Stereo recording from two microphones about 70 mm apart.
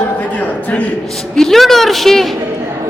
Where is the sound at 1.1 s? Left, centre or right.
Centre.